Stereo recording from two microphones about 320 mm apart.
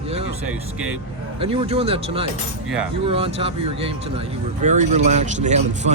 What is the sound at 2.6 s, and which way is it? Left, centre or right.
Speech, centre.